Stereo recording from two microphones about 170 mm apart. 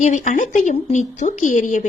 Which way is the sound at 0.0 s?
45° left (ahead or behind).